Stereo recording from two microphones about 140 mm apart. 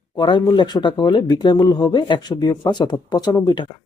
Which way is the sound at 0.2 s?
30° left (ahead or behind).